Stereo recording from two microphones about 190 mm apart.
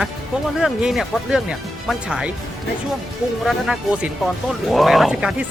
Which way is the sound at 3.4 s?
5° right (ahead or behind).